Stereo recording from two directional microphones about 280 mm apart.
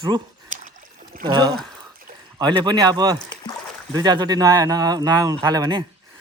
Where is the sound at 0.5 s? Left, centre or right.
Right.